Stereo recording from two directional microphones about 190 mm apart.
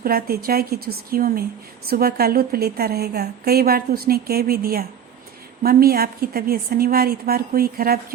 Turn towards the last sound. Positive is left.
turn(degrees=-50)  # may be behind; listen again after turning